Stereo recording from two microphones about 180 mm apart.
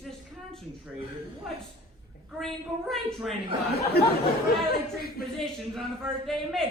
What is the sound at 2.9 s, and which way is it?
Speech, centre (ahead or behind).